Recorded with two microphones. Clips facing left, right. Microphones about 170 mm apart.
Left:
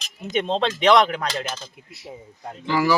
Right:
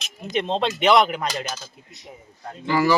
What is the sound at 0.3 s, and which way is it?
A man's voice, centre (ahead or behind).